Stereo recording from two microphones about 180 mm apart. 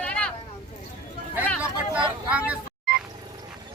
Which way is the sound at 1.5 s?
5° right (ahead or behind).